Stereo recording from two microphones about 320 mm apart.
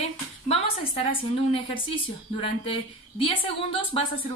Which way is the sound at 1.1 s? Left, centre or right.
Centre.